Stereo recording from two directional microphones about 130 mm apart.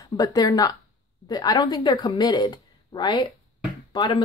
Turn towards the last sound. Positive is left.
turn(degrees=35)  # may be behind; listen again after turning